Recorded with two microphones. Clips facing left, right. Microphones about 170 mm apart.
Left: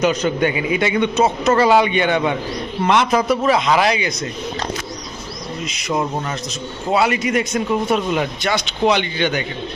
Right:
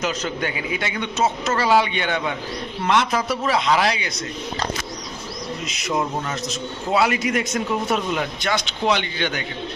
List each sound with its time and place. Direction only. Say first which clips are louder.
0.7 s speech: left 9 dB; 15° left (ahead or behind)
5.6 s a man's voice: left 3 dB; centre (ahead or behind)
8.1 s speech: left 4 dB; 15° left (ahead or behind)